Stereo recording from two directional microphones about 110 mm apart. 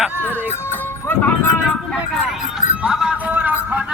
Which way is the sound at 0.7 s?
20° left (ahead or behind).